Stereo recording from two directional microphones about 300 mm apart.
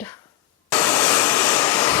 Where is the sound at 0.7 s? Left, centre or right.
Centre.